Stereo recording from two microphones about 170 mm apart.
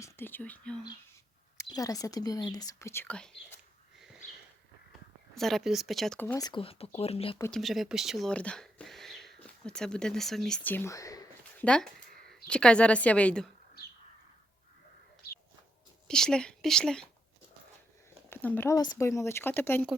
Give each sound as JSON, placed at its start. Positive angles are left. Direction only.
{"t": 0.0, "sound": "speech", "side_deg": 10}
{"t": 1.5, "sound": "speech", "side_deg": 20}
{"t": 5.3, "sound": "speech", "side_deg": 0}
{"t": 6.4, "sound": "speech", "side_deg": 30}
{"t": 7.5, "sound": "speech", "side_deg": 0}
{"t": 11.5, "sound": "speech", "side_deg": 5}
{"t": 16.0, "sound": "speech", "side_deg": 5}
{"t": 18.3, "sound": "speech", "side_deg": 10}